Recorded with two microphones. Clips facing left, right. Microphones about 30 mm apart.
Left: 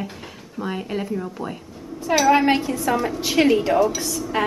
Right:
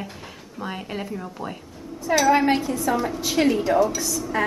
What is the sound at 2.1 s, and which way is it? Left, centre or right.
A woman's voice, centre.